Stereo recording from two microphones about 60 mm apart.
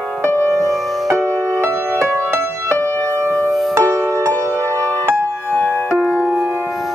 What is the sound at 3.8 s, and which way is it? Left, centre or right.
Music, right.